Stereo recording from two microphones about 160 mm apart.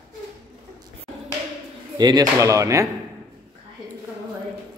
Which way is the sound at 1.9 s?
25° right (ahead or behind).